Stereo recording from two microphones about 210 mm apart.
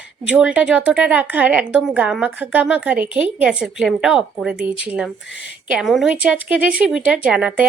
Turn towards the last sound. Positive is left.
turn(degrees=-5)  # may be behind; listen again after turning